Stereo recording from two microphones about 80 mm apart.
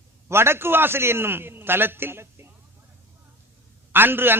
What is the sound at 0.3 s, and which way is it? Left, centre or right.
A man's voice, right.